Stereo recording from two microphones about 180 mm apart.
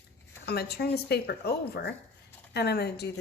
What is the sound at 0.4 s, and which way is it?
Speech, 65° left (ahead or behind).